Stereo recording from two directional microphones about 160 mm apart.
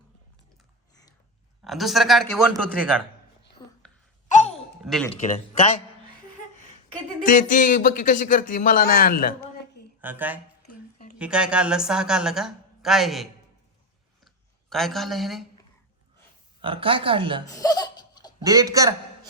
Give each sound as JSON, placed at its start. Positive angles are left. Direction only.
{"t": 1.6, "sound": "a woman's voice", "side_deg": 0}
{"t": 3.6, "sound": "whispering", "side_deg": 30}
{"t": 4.8, "sound": "speech", "side_deg": 0}
{"t": 5.2, "sound": "a man's voice", "side_deg": 45}
{"t": 7.3, "sound": "speech", "side_deg": 55}
{"t": 10.0, "sound": "a woman's voice", "side_deg": -10}
{"t": 14.3, "sound": "speech", "side_deg": 0}
{"t": 16.6, "sound": "speech", "side_deg": -35}
{"t": 17.5, "sound": "laughter", "side_deg": 25}
{"t": 18.4, "sound": "a man's voice", "side_deg": -20}